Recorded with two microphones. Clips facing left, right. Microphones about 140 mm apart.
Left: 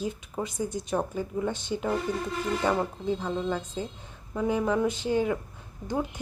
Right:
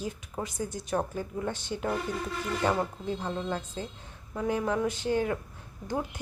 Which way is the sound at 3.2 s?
5° left (ahead or behind).